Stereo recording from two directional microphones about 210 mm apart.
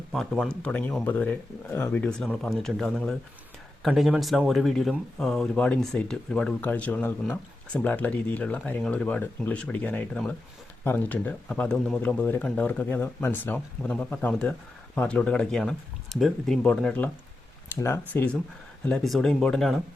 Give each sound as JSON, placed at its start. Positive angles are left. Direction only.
{"t": 0.1, "sound": "speech", "side_deg": 0}